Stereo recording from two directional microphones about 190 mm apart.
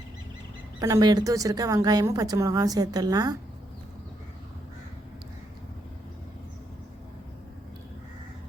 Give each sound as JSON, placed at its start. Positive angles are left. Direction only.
{"t": 0.8, "sound": "a woman's voice", "side_deg": -20}